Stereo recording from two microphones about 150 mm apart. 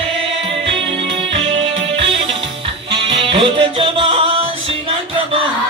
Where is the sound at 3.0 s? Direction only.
35° right (ahead or behind).